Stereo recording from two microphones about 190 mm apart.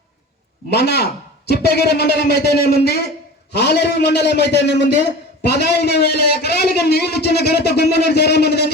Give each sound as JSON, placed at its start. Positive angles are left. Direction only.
{"t": 0.7, "sound": "a man's voice", "side_deg": 60}